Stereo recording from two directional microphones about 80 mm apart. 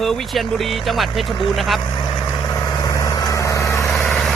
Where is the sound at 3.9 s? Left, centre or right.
Centre.